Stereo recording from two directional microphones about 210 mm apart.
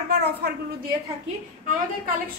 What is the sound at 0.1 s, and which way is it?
Speech, 50° right (ahead or behind).